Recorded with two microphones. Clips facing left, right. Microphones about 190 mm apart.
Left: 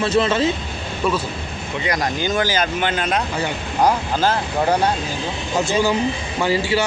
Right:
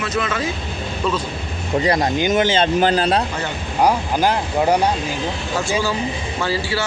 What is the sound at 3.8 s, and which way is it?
Speech, 15° right (ahead or behind).